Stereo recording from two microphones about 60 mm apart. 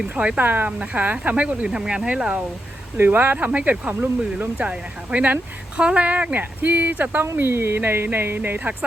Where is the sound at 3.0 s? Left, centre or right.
Right.